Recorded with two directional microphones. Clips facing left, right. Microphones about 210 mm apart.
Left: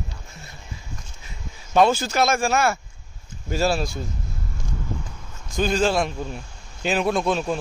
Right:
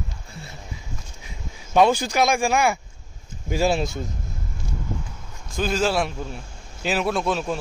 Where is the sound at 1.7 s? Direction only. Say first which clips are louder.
Even; 15° right (ahead or behind).